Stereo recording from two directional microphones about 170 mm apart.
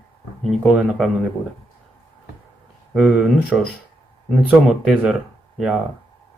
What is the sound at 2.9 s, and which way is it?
Speech, 5° right (ahead or behind).